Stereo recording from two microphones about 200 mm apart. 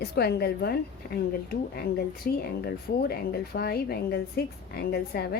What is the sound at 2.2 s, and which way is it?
A woman's voice, 50° left (ahead or behind).